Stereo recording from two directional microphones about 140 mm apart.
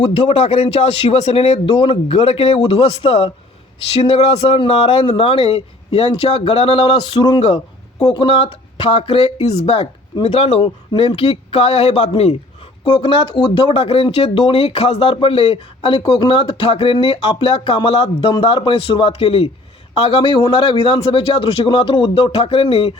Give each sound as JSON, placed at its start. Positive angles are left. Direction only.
{"t": 0.3, "sound": "a man's voice", "side_deg": 50}